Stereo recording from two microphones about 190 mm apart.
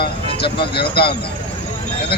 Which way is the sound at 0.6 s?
55° left (ahead or behind).